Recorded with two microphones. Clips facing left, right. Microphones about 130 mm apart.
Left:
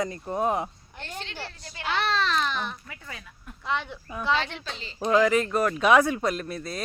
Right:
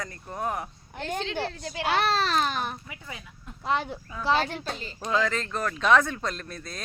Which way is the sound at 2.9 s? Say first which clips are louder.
Right 1 dB; 20° right (ahead or behind).